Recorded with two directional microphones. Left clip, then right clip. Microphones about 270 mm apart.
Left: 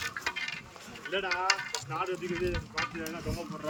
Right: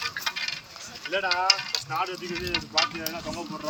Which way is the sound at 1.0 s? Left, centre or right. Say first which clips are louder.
Right 6 dB; right.